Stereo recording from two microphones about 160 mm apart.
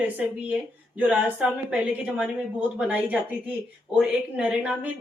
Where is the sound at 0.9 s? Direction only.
10° right (ahead or behind).